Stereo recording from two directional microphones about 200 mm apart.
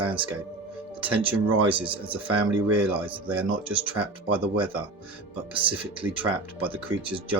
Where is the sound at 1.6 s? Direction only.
25° right (ahead or behind).